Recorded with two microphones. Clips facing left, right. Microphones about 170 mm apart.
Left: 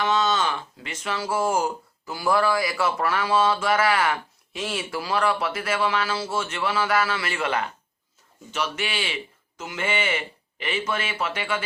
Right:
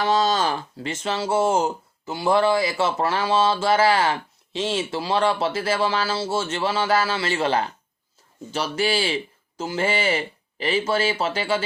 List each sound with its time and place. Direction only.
0.0 s speech: 35° right (ahead or behind)